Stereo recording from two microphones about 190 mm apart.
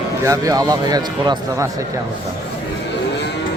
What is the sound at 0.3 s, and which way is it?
A man's voice, 20° right (ahead or behind).